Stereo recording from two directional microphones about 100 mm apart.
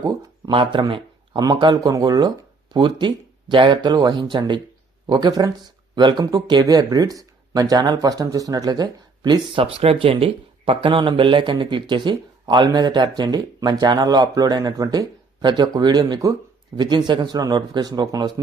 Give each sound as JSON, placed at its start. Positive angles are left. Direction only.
{"t": 0.5, "sound": "speech", "side_deg": -55}
{"t": 2.7, "sound": "speech", "side_deg": -50}
{"t": 9.6, "sound": "speech", "side_deg": -70}